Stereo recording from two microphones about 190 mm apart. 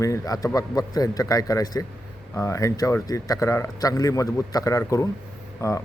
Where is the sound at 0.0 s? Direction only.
15° left (ahead or behind).